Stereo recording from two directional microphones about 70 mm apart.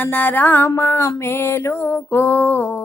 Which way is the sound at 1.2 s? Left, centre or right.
Left.